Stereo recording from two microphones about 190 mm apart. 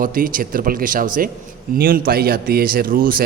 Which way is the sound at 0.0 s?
45° right (ahead or behind).